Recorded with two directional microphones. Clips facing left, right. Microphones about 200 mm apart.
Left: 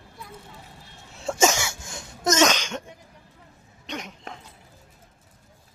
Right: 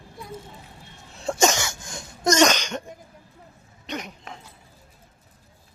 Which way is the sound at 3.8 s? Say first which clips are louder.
Right 2 dB; 5° right (ahead or behind).